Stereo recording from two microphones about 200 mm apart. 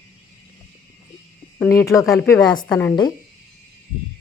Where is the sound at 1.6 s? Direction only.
15° left (ahead or behind).